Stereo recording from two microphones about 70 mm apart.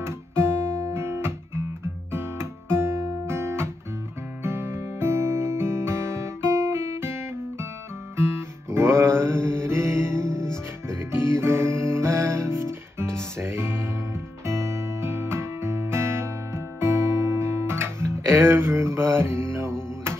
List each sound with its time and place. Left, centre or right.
0.0 s guitar: right
4.4 s music: right